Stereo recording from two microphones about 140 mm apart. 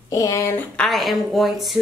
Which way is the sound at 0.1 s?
25° left (ahead or behind).